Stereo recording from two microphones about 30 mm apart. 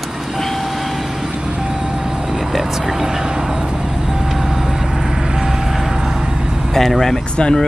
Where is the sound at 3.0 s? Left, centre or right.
Right.